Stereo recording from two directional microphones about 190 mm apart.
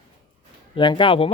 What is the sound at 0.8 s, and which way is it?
Speech, 25° left (ahead or behind).